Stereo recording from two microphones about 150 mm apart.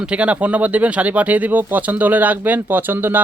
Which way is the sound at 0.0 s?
10° right (ahead or behind).